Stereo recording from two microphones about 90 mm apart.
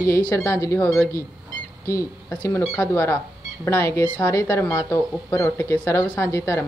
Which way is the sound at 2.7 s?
30° left (ahead or behind).